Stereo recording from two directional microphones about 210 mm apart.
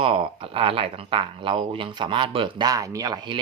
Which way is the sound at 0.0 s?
25° right (ahead or behind).